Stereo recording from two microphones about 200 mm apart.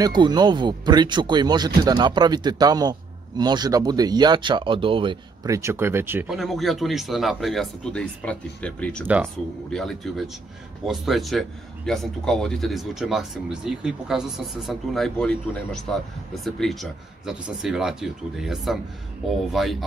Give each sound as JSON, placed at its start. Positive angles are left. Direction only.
{"t": 0.0, "sound": "speech", "side_deg": -20}
{"t": 9.0, "sound": "speech", "side_deg": -10}
{"t": 9.7, "sound": "a man's voice", "side_deg": 0}